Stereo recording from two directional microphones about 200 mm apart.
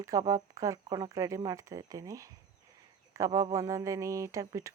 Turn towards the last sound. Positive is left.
turn(degrees=-15)  # may be behind; listen again after turning